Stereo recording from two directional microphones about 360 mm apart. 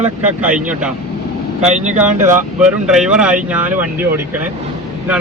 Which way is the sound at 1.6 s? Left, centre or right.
Centre.